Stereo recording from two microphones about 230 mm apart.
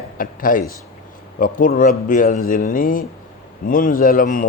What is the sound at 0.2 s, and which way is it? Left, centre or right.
Speech, left.